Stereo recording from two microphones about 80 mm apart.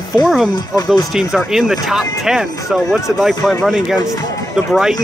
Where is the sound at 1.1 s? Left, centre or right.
Centre.